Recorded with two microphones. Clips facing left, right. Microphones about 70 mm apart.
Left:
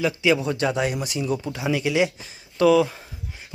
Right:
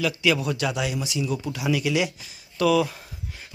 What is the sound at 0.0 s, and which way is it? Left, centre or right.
Speech, left.